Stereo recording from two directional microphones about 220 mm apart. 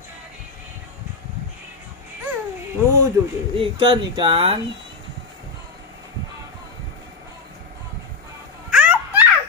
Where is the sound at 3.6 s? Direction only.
25° right (ahead or behind).